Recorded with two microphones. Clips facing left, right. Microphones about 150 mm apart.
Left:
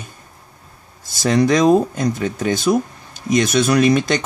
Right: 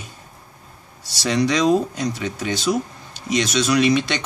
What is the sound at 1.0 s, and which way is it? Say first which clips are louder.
Speech: left 4 dB; 50° left (ahead or behind).